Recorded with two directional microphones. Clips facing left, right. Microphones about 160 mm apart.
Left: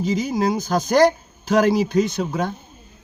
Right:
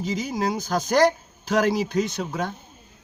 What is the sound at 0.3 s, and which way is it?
A man's voice, 25° left (ahead or behind).